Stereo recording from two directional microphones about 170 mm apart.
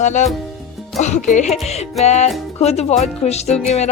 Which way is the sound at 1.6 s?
40° left (ahead or behind).